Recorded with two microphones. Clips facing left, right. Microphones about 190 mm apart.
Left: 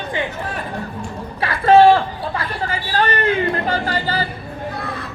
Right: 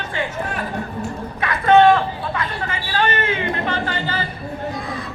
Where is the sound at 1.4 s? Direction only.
30° left (ahead or behind).